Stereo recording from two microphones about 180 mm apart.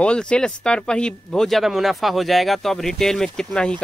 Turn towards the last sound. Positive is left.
turn(degrees=5)  # may be behind; listen again after turning